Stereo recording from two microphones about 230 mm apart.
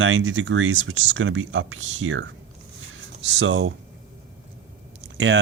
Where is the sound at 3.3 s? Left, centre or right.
Right.